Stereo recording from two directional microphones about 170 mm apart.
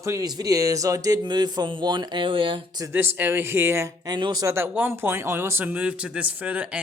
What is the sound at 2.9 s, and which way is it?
Speech, 10° right (ahead or behind).